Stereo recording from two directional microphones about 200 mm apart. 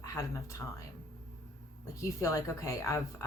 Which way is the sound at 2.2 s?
15° left (ahead or behind).